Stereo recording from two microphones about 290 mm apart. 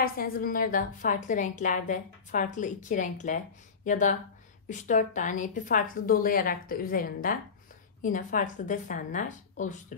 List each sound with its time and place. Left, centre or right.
0.0 s a woman's voice: left